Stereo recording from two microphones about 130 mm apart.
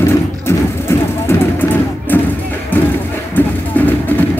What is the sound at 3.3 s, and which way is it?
Music, 15° left (ahead or behind).